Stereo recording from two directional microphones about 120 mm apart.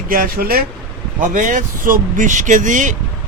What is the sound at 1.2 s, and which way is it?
Speech, 90° right.